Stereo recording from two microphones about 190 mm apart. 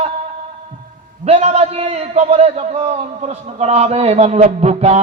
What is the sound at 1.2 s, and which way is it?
A man's voice, 35° right (ahead or behind).